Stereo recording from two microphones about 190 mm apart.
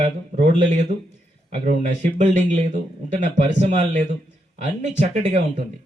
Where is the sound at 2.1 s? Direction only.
40° right (ahead or behind).